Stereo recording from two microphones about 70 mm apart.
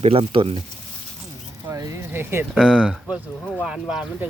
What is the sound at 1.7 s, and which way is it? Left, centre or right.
Speech, right.